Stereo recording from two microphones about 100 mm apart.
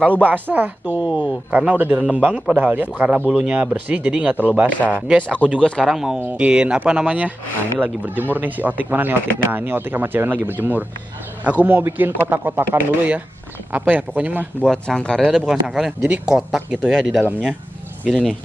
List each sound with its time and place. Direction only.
0.2 s speech: 20° right (ahead or behind)
4.6 s speech: 15° left (ahead or behind)
5.9 s speech: 5° right (ahead or behind)
14.6 s speech: 5° left (ahead or behind)
15.3 s speech: 5° right (ahead or behind)
17.2 s speech: 15° right (ahead or behind)
18.0 s speech: 5° left (ahead or behind)